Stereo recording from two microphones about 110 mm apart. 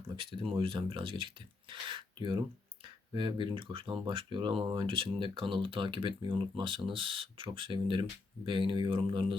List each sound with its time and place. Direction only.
0.2 s speech: 50° right (ahead or behind)